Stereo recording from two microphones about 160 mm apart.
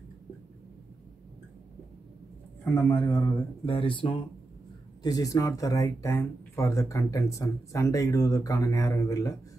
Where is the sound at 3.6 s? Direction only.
35° left (ahead or behind).